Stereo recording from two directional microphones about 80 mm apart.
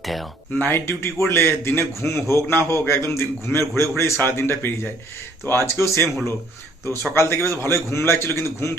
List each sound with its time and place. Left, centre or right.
0.0 s speech: centre
0.6 s a man's voice: left
7.1 s a man's voice: left